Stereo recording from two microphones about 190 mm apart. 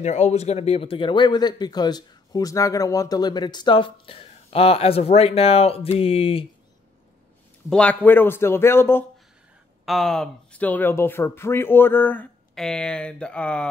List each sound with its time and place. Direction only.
0.0 s speech: 35° left (ahead or behind)
7.7 s speech: 5° left (ahead or behind)
9.8 s speech: centre (ahead or behind)